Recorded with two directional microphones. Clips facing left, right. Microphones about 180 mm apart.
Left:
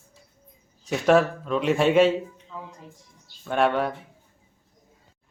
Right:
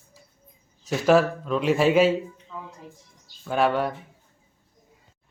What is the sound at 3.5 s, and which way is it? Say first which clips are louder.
Speech: even; centre (ahead or behind).